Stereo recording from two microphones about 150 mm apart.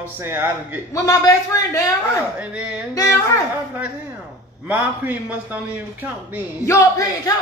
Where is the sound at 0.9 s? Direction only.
20° left (ahead or behind).